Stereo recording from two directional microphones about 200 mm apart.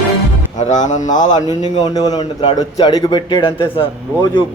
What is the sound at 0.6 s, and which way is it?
Speech, 35° left (ahead or behind).